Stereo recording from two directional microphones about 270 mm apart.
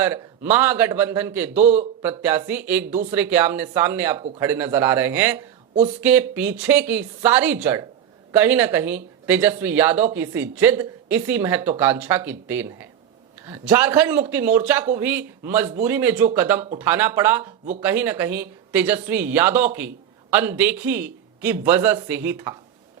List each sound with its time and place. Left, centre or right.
0.5 s a man's voice: centre
1.6 s a man's voice: right
2.0 s a man's voice: centre